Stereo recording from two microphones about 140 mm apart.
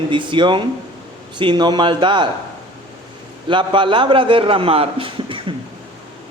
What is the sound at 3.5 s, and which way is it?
Speech, 35° right (ahead or behind).